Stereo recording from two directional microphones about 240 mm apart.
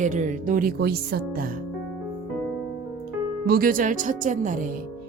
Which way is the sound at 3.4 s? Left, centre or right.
Right.